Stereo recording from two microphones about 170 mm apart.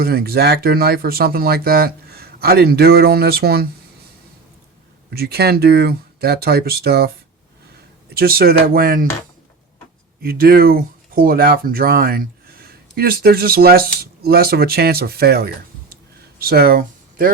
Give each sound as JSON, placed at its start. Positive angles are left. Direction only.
{"t": 0.0, "sound": "speech", "side_deg": -65}
{"t": 5.1, "sound": "speech", "side_deg": -70}
{"t": 8.1, "sound": "speech", "side_deg": -65}
{"t": 10.2, "sound": "speech", "side_deg": -60}